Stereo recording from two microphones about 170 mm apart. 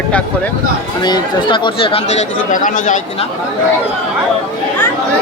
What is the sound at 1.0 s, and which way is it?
Speech, 25° left (ahead or behind).